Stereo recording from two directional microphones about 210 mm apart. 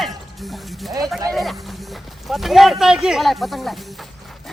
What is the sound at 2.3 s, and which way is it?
Speech, centre (ahead or behind).